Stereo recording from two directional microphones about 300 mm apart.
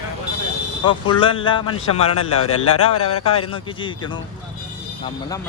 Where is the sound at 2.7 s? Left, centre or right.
Left.